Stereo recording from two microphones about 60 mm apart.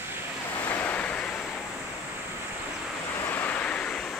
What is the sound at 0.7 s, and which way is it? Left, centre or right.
Waves, left.